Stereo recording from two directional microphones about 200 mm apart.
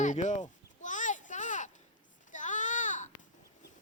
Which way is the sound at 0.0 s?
35° left (ahead or behind).